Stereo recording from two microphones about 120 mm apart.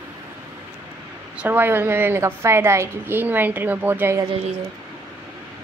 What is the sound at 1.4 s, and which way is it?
A woman's voice, 15° right (ahead or behind).